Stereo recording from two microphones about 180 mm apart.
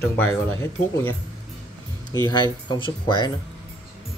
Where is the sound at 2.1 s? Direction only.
25° left (ahead or behind).